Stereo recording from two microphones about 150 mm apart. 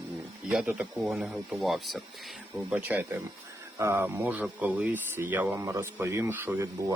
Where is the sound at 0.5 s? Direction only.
10° right (ahead or behind).